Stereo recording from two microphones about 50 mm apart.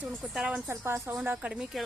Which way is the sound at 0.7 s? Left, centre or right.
Right.